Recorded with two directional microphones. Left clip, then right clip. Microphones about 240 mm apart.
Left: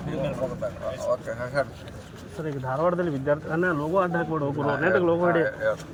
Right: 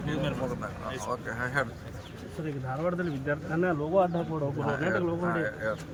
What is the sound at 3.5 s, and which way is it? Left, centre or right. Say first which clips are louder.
Speech: right 2 dB; left.